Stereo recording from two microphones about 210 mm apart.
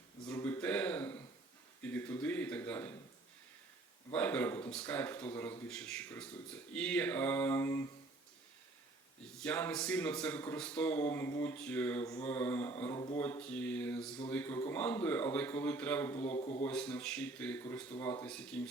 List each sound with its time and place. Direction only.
0.3 s a sound: 10° left (ahead or behind)
1.8 s speech: 10° left (ahead or behind)
4.1 s speech: 5° left (ahead or behind)
9.4 s speech: 5° left (ahead or behind)
13.4 s mantra: 5° left (ahead or behind)
14.3 s speech: 10° left (ahead or behind)
16.2 s a man's voice: 30° left (ahead or behind)
16.6 s speech: 5° left (ahead or behind)
18.0 s mantra: 10° left (ahead or behind)